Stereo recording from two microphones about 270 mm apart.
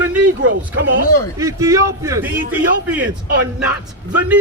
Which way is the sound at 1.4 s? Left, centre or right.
Centre.